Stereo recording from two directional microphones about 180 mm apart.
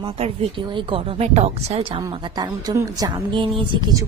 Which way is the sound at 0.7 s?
30° right (ahead or behind).